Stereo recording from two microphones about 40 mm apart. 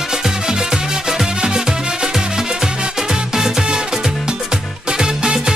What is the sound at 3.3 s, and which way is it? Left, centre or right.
Music, centre.